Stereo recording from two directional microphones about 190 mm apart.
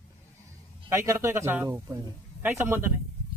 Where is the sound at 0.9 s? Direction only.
15° right (ahead or behind).